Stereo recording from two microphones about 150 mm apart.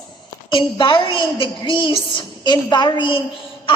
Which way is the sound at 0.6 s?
30° left (ahead or behind).